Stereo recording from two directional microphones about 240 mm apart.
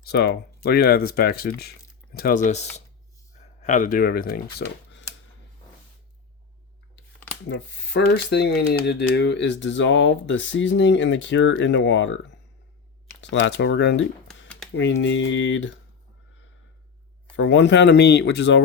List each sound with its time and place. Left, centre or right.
0.0 s speech: left
7.4 s speech: left
13.4 s speech: left
14.4 s a sound: centre
14.8 s speech: left
17.3 s speech: left